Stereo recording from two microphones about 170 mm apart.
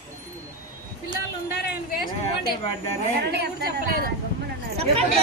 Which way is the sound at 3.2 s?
70° right (ahead or behind).